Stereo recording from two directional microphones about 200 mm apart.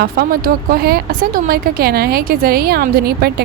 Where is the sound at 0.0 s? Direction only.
50° right (ahead or behind).